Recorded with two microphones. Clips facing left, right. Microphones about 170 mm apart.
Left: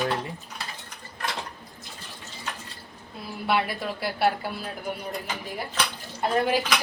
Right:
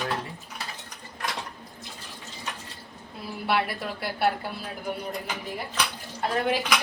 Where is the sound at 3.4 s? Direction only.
Centre (ahead or behind).